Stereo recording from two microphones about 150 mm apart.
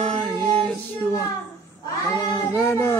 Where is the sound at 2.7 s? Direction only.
15° left (ahead or behind).